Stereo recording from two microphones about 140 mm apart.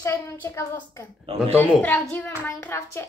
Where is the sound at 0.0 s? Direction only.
20° left (ahead or behind).